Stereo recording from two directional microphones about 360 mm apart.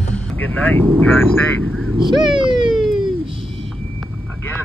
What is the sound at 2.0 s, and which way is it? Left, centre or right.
Speech, centre.